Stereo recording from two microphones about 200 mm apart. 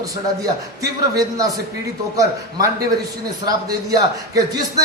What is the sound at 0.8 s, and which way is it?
Speech, 20° right (ahead or behind).